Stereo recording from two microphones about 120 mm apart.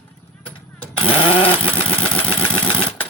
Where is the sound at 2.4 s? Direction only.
45° left (ahead or behind).